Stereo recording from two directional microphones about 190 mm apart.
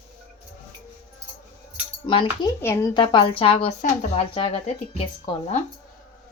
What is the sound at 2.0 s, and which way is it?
Speech, 25° left (ahead or behind).